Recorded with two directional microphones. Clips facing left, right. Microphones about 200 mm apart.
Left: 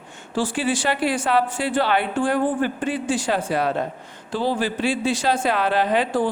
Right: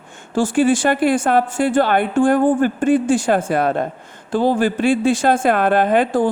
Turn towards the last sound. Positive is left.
turn(degrees=-50)  # may be behind; listen again after turning